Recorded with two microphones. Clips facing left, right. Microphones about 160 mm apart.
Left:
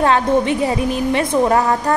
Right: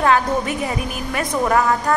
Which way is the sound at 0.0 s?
30° left (ahead or behind).